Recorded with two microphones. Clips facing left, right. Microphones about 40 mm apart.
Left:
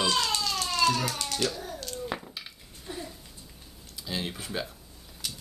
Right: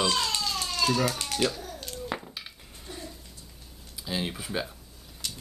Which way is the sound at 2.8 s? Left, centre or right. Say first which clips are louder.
Left 3 dB; centre.